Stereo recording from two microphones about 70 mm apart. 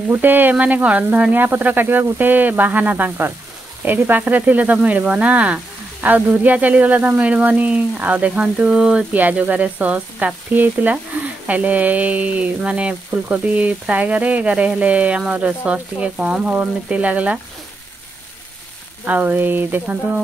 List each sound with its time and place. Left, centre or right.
0.1 s speech: right; by 9.0 s centre
9.1 s speech: right
19.0 s speech: right